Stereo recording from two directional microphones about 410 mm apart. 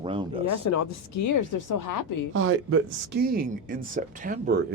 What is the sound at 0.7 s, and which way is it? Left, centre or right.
Speech, left.